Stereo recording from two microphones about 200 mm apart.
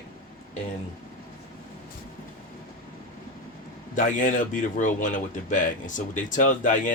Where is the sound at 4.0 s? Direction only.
40° left (ahead or behind).